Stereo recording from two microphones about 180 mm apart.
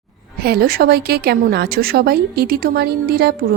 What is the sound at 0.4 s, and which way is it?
A woman's voice, 55° right (ahead or behind).